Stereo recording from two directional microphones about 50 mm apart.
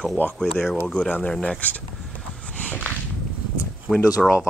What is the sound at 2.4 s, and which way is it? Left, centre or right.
Walk, left.